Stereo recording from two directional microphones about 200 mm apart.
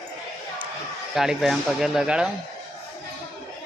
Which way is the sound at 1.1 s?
Centre (ahead or behind).